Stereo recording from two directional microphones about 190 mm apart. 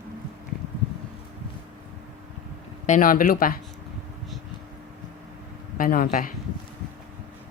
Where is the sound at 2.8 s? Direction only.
45° left (ahead or behind).